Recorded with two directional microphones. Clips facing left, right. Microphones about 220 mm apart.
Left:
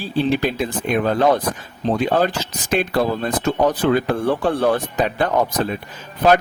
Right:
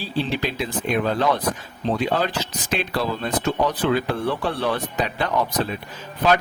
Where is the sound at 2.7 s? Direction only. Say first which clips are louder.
Left 6 dB; 50° left (ahead or behind).